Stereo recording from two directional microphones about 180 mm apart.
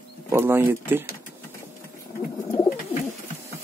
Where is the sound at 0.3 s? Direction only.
10° right (ahead or behind).